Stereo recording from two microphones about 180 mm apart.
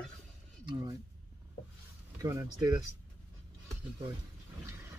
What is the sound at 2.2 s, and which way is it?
Speech, 20° right (ahead or behind).